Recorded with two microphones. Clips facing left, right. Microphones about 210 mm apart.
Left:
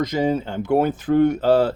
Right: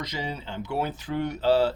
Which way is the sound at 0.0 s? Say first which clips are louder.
Left 13 dB; 50° left (ahead or behind).